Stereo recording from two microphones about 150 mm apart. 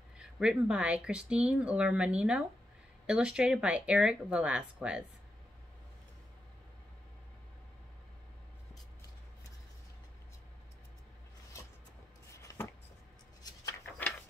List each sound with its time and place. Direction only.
0.2 s speech: 5° right (ahead or behind)
12.3 s chopping: 20° left (ahead or behind)
13.4 s a sound: 25° left (ahead or behind)